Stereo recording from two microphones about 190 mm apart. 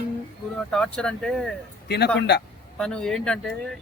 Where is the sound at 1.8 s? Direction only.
60° left (ahead or behind).